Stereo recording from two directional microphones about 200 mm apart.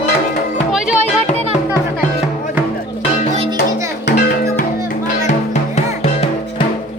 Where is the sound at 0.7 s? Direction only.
5° right (ahead or behind).